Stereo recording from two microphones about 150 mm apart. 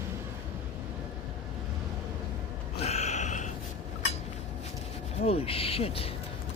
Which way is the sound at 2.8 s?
45° left (ahead or behind).